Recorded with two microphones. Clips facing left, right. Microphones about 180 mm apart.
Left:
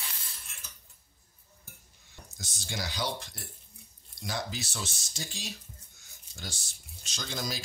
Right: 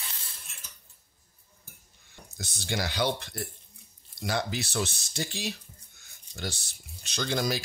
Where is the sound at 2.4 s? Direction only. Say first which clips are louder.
Right 6 dB; 65° right (ahead or behind).